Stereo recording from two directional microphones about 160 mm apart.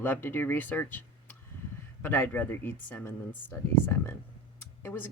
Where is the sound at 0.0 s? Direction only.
15° left (ahead or behind).